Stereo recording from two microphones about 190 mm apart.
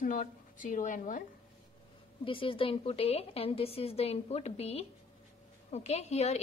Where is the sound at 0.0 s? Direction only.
45° left (ahead or behind).